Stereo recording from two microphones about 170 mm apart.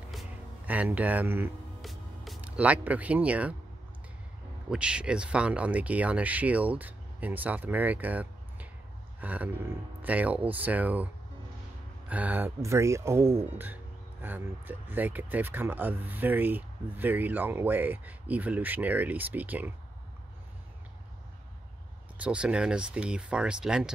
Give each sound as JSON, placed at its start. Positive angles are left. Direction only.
{"t": 0.1, "sound": "music", "side_deg": -5}
{"t": 1.8, "sound": "music", "side_deg": 0}
{"t": 4.6, "sound": "speech", "side_deg": -5}
{"t": 12.1, "sound": "speech", "side_deg": -10}
{"t": 22.2, "sound": "speech", "side_deg": -5}